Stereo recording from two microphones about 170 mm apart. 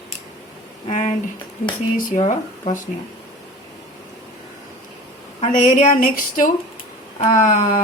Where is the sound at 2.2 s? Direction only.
45° left (ahead or behind).